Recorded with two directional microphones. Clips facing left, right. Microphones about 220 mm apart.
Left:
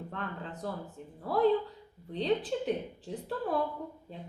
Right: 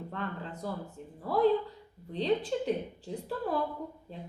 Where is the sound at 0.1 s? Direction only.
Centre (ahead or behind).